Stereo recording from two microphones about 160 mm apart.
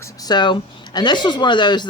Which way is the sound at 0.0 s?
25° left (ahead or behind).